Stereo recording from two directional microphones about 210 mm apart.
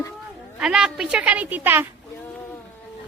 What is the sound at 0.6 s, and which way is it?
A woman's voice, 5° right (ahead or behind).